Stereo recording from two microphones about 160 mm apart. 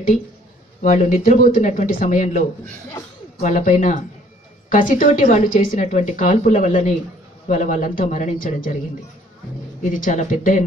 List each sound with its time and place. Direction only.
0.8 s speech: 50° left (ahead or behind)
9.9 s speech: 55° left (ahead or behind)